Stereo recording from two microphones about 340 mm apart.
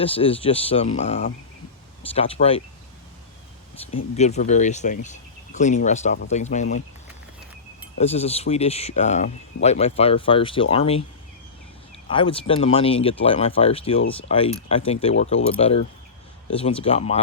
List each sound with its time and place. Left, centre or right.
0.0 s speech: centre
4.1 s speech: centre
7.9 s speech: centre
12.0 s speech: centre